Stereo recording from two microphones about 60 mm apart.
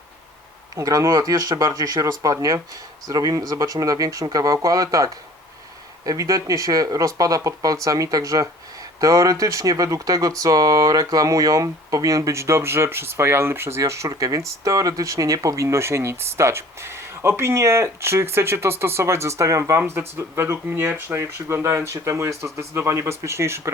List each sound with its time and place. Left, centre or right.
0.8 s speech: right
15.6 s speech: right
19.8 s speech: right